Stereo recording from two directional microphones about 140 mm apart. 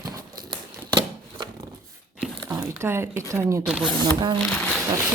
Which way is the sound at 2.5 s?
20° right (ahead or behind).